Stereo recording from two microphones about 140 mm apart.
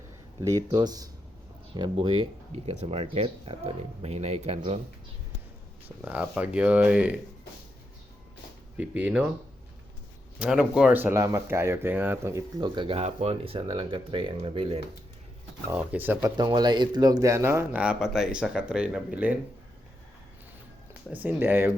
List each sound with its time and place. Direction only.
0.4 s speech: 30° right (ahead or behind)
2.6 s speech: 45° right (ahead or behind)
6.1 s speech: 10° right (ahead or behind)
8.8 s speech: 10° right (ahead or behind)
10.3 s speech: 10° right (ahead or behind)
12.5 s speech: 30° right (ahead or behind)
13.0 s speech: 50° right (ahead or behind)
15.7 s speech: 10° right (ahead or behind)
16.4 s speech: 30° right (ahead or behind); by 19.4 s 10° right (ahead or behind)
21.1 s speech: 10° right (ahead or behind)